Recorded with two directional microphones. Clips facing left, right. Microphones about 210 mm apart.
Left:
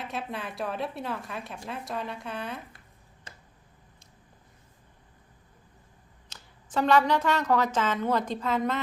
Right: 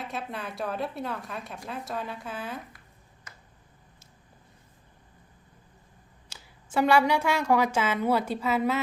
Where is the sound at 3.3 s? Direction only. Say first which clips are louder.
Left 2 dB; 30° left (ahead or behind).